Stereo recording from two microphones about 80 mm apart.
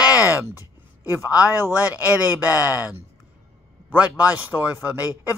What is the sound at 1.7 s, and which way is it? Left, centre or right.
Speech, left.